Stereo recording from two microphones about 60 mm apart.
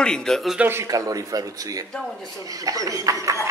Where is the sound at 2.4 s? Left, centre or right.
Right.